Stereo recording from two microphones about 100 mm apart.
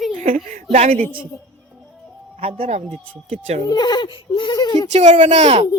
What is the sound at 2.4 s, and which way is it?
Speech, 75° right (ahead or behind).